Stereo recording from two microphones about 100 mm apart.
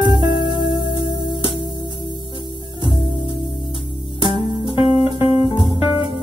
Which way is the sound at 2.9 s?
55° left (ahead or behind).